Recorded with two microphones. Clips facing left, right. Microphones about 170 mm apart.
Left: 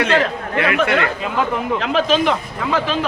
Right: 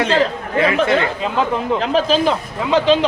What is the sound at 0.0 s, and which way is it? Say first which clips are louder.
Speech: right 1 dB; 30° right (ahead or behind).